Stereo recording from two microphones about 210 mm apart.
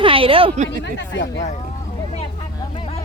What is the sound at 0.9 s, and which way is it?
Speech, 55° left (ahead or behind).